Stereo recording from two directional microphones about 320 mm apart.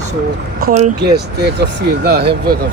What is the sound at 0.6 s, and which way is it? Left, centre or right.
Speech, right.